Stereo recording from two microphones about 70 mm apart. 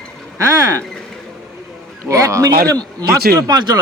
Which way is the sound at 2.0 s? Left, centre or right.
Right.